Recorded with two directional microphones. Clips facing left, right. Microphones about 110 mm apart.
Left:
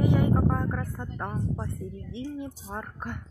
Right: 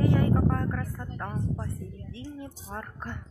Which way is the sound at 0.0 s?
15° left (ahead or behind).